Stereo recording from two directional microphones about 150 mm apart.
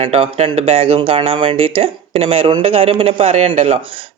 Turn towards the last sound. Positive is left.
turn(degrees=-45)  # may be behind; listen again after turning